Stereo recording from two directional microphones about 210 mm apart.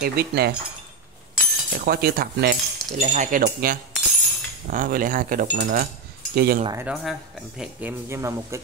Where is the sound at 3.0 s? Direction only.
35° right (ahead or behind).